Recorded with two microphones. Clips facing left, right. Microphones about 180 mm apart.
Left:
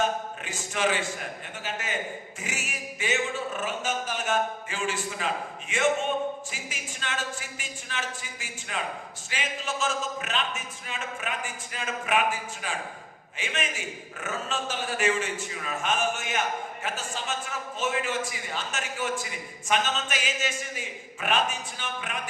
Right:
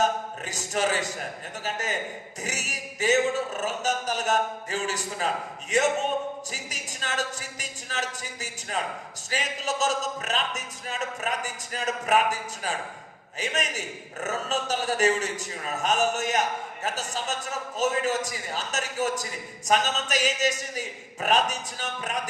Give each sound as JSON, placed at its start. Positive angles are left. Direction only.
{"t": 0.0, "sound": "a man's voice", "side_deg": -40}